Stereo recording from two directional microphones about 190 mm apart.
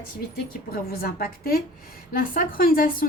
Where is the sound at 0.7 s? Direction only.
50° left (ahead or behind).